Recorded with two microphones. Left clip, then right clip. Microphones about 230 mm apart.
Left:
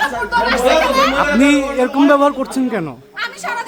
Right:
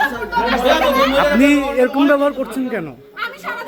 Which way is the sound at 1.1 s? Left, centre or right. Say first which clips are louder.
Right 1 dB; centre.